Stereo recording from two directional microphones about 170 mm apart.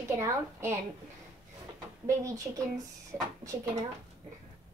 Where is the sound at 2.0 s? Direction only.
20° right (ahead or behind).